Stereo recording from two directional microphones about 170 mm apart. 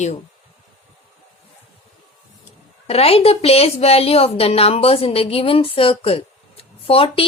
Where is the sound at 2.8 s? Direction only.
35° left (ahead or behind).